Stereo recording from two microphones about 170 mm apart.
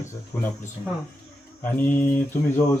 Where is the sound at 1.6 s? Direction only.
10° left (ahead or behind).